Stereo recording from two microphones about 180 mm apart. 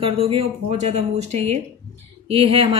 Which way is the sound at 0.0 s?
30° right (ahead or behind).